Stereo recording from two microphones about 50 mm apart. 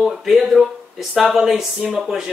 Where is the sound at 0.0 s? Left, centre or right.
Centre.